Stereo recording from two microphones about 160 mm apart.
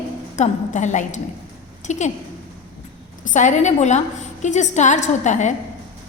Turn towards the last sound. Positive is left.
turn(degrees=50)  # may be behind; listen again after turning